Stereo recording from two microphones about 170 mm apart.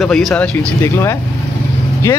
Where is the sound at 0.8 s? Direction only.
15° left (ahead or behind).